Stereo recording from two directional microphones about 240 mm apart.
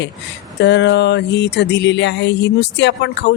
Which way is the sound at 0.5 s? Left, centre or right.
Left.